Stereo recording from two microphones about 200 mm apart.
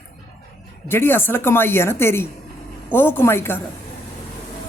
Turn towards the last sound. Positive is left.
turn(degrees=10)  # may be behind; listen again after turning